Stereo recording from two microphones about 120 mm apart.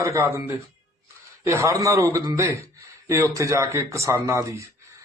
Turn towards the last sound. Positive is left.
turn(degrees=-25)  # may be behind; listen again after turning